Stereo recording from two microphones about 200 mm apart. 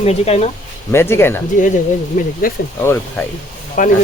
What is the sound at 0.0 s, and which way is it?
Speech, 30° left (ahead or behind).